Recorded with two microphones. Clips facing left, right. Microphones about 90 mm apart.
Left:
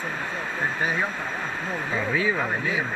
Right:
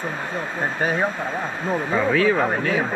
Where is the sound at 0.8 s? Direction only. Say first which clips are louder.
Right 6 dB; 30° right (ahead or behind).